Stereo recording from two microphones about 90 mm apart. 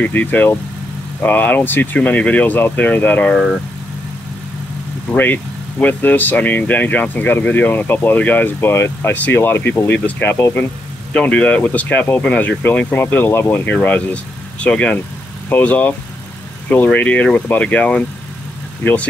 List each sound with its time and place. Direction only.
0.0 s speech: 20° left (ahead or behind)
5.1 s speech: 20° left (ahead or behind)